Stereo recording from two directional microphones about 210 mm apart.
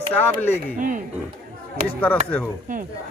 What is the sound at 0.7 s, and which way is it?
Speech, 40° right (ahead or behind).